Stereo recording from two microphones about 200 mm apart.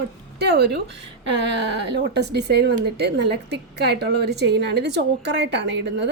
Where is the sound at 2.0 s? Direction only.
55° right (ahead or behind).